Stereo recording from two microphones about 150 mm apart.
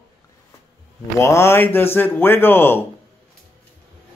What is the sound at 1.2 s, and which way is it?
Speech, 20° left (ahead or behind).